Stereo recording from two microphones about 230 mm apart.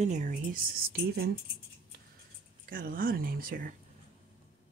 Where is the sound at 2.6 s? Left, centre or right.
Right.